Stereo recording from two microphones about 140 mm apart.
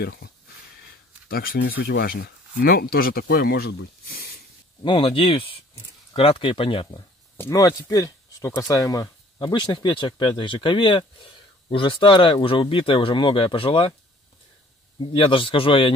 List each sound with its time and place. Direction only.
1.3 s speech: 90° left
4.8 s speech: 40° left (ahead or behind)
7.3 s speech: 20° left (ahead or behind); by 13.9 s 40° left (ahead or behind)
15.0 s speech: 35° left (ahead or behind)